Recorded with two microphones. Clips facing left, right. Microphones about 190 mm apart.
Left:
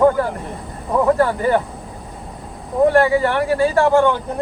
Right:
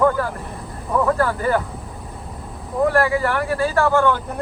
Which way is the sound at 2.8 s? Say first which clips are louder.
Left 4 dB; 25° left (ahead or behind).